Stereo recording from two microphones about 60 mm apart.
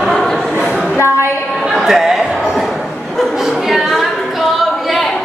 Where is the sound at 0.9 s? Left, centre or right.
Left.